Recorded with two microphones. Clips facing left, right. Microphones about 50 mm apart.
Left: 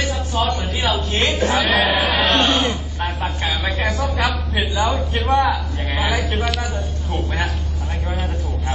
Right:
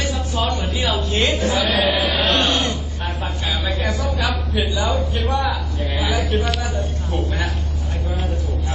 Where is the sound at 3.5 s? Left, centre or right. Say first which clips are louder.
Even; left.